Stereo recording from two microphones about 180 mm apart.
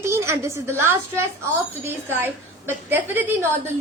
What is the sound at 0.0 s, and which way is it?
A woman's voice, 15° right (ahead or behind).